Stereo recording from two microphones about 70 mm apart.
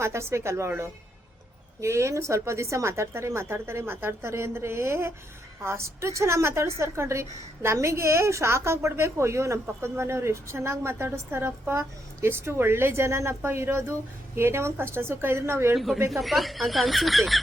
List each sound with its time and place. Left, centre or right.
0.0 s a woman's voice: right
15.7 s speech: centre